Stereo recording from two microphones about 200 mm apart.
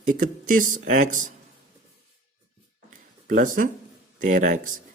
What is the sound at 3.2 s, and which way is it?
Speech, 40° right (ahead or behind).